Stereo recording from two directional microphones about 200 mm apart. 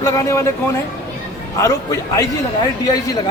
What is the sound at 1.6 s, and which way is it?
Speech, 15° left (ahead or behind).